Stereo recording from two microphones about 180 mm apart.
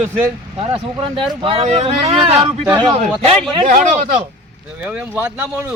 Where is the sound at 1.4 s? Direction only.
35° right (ahead or behind).